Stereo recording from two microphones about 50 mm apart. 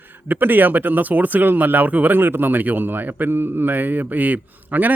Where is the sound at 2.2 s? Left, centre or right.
Right.